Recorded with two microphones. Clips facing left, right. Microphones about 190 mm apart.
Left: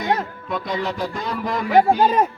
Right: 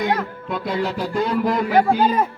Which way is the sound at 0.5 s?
5° right (ahead or behind).